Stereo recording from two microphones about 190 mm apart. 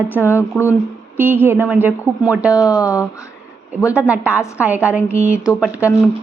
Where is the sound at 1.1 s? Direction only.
10° right (ahead or behind).